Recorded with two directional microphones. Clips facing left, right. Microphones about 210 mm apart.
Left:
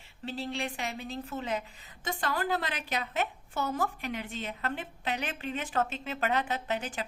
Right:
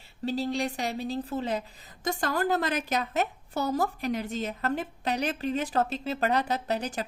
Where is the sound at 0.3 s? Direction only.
40° right (ahead or behind).